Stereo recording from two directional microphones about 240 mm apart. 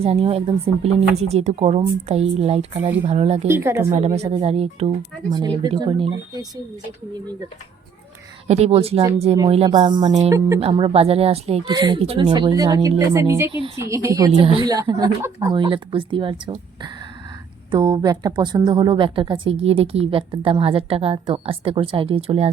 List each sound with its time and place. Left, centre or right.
0.0 s speech: right
3.4 s speech: centre
3.8 s speech: right
8.4 s speech: right